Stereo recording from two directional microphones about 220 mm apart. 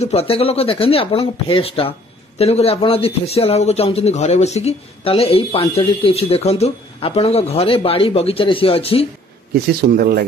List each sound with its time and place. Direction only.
0.0 s speech: 25° left (ahead or behind)
9.5 s speech: 45° right (ahead or behind)